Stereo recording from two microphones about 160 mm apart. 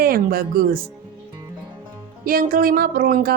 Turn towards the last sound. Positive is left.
turn(degrees=-65)  # may be behind; listen again after turning